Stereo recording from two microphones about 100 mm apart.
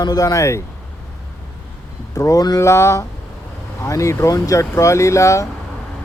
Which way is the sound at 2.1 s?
35° left (ahead or behind).